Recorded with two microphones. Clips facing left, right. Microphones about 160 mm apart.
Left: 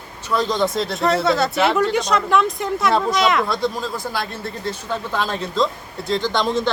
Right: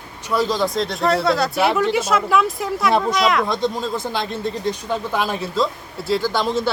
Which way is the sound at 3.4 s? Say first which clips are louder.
Right 1 dB; 20° right (ahead or behind).